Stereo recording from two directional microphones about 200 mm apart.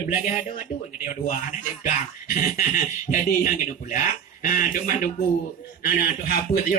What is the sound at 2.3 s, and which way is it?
Speech, 40° left (ahead or behind).